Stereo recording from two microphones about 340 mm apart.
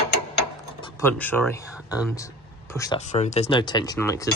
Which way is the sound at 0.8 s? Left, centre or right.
Centre.